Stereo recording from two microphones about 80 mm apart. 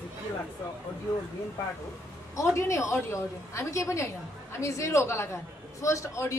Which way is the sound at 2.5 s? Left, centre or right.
Left.